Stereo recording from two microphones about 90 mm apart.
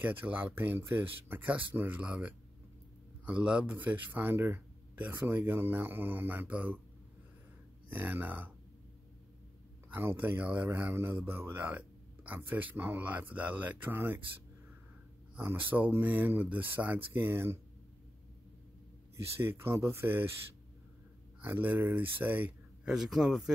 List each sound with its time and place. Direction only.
0.0 s speech: 20° right (ahead or behind)
7.9 s speech: 20° right (ahead or behind)
9.9 s speech: 20° right (ahead or behind)
15.3 s speech: 20° right (ahead or behind)
19.4 s speech: 30° right (ahead or behind)
21.4 s speech: 20° right (ahead or behind)
22.8 s a man's voice: 5° right (ahead or behind)